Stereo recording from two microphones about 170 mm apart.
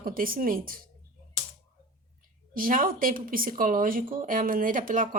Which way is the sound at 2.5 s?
55° right (ahead or behind).